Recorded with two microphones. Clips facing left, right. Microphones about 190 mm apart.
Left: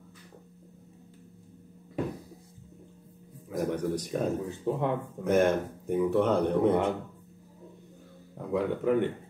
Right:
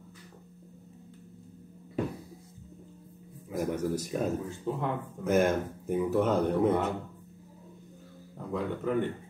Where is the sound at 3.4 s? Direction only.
10° right (ahead or behind).